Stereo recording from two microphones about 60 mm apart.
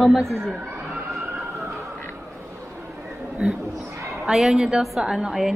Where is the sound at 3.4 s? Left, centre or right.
Centre.